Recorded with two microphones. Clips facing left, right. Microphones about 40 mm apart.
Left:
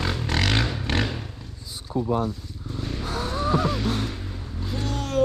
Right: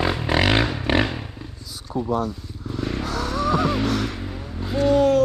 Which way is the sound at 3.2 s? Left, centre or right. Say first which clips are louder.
Right 3 dB; right.